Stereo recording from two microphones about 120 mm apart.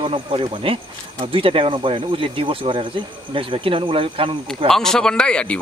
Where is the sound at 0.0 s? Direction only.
50° right (ahead or behind).